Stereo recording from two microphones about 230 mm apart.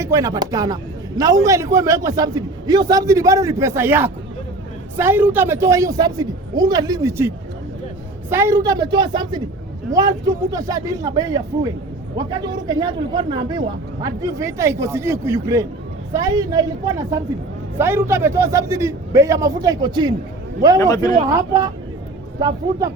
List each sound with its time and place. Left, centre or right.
0.0 s speech: centre
17.7 s speech: centre
20.7 s a man's voice: centre
21.2 s speech: centre